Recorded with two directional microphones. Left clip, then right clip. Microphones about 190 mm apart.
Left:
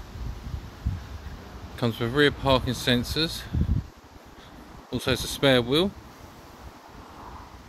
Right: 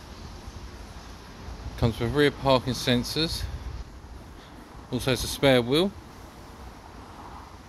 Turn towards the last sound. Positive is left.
turn(degrees=0)  # may be behind; listen again after turning